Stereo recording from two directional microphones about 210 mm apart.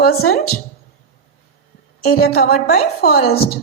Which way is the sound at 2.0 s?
45° left (ahead or behind).